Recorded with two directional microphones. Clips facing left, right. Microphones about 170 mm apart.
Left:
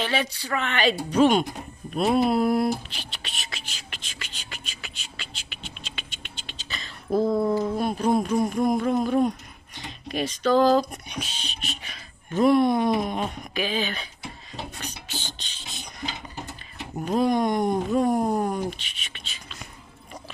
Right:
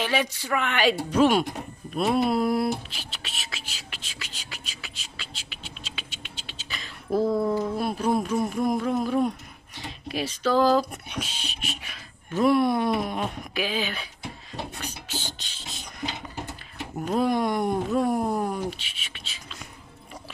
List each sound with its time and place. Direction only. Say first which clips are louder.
0.0 s speech: right 1 dB; 10° right (ahead or behind)
7.2 s speech: left 2 dB; 10° left (ahead or behind)
7.7 s speech: left 2 dB; 5° right (ahead or behind)
14.5 s a sound: right 1 dB; 5° right (ahead or behind)
17.0 s speech: left 2 dB; 5° right (ahead or behind)
18.2 s speech: left 2 dB; 15° left (ahead or behind)
18.5 s speech: left 2 dB; 5° right (ahead or behind)